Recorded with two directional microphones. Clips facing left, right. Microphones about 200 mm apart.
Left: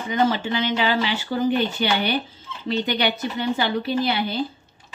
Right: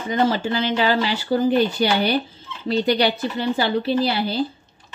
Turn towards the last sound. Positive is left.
turn(degrees=-35)  # may be behind; listen again after turning